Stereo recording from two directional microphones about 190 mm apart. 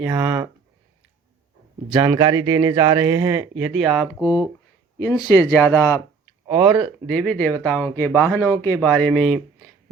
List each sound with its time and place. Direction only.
0.0 s speech: 10° right (ahead or behind)
2.0 s speech: 20° right (ahead or behind)
3.7 s speech: centre (ahead or behind)
4.9 s speech: 20° left (ahead or behind)
6.5 s speech: 10° right (ahead or behind)
6.7 s speech: 5° left (ahead or behind)